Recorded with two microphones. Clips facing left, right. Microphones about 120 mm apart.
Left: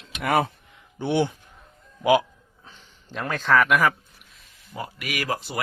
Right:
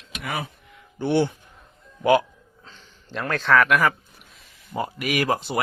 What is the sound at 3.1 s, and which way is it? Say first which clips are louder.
Speech: right 1 dB; 5° left (ahead or behind).